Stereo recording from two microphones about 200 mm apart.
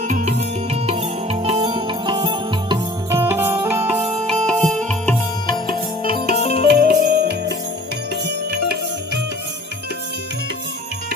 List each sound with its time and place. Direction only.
0.1 s music: 35° right (ahead or behind)
3.2 s music: 10° right (ahead or behind)
4.4 s music: 5° left (ahead or behind)
5.5 s music: 20° left (ahead or behind)
6.6 s music: 50° right (ahead or behind)